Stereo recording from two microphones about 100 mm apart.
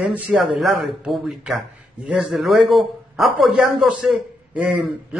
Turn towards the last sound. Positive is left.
turn(degrees=-10)  # may be behind; listen again after turning